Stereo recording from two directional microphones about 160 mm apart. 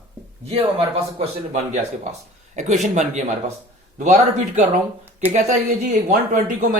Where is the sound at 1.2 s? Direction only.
45° right (ahead or behind).